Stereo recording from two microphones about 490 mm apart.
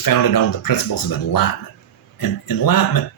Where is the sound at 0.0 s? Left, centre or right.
Left.